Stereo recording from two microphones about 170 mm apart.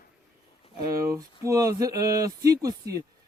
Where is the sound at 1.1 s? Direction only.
20° right (ahead or behind).